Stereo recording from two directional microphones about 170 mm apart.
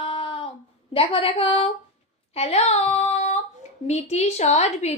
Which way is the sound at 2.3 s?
35° left (ahead or behind).